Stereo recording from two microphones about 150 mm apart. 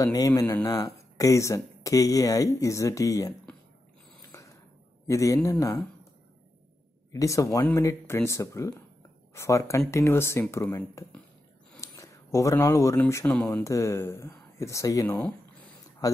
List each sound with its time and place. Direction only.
0.0 s speech: 25° left (ahead or behind)
5.0 s speech: 20° left (ahead or behind)
7.1 s speech: 20° left (ahead or behind)